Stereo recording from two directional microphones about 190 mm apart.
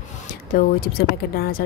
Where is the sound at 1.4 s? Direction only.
50° left (ahead or behind).